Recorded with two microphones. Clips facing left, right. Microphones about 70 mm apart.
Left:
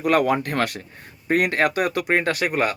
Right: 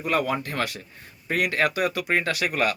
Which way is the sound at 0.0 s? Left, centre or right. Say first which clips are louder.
Left 6 dB; left.